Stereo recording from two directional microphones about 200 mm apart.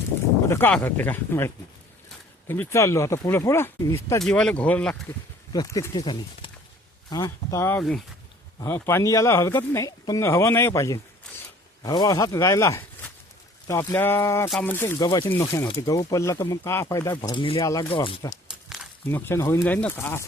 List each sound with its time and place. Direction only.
0.4 s speech: 10° left (ahead or behind)
4.2 s speech: 5° left (ahead or behind)
5.5 s speech: 15° left (ahead or behind)